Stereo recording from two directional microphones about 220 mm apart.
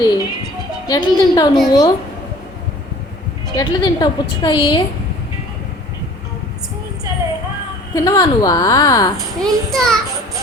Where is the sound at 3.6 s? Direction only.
15° left (ahead or behind).